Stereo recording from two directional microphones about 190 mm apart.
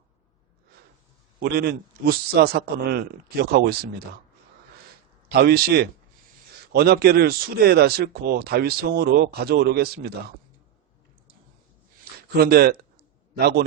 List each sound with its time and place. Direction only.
1.4 s speech: 55° right (ahead or behind)
5.3 s speech: 55° right (ahead or behind)
12.4 s speech: 55° right (ahead or behind)